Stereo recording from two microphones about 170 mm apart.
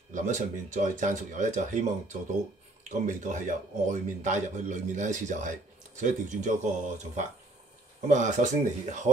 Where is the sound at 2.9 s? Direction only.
45° right (ahead or behind).